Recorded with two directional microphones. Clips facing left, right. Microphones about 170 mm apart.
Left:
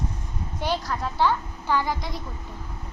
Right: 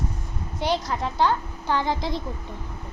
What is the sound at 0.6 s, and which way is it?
A child's voice, 15° right (ahead or behind).